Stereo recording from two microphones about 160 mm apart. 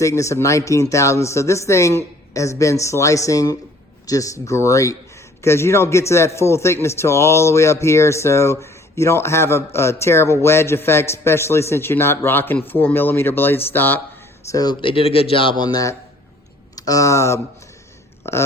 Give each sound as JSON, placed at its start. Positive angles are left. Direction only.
{"t": 0.0, "sound": "a man's voice", "side_deg": 20}
{"t": 14.4, "sound": "a man's voice", "side_deg": 25}